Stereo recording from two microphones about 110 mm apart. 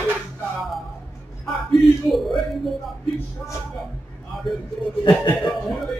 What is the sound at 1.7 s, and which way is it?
Speech, centre (ahead or behind).